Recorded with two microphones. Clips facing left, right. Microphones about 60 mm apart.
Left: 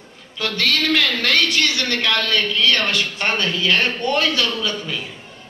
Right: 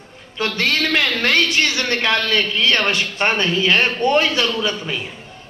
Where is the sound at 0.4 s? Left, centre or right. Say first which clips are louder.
Right 2 dB; right.